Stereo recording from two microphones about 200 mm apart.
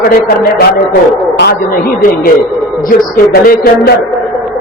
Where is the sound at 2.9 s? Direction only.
45° left (ahead or behind).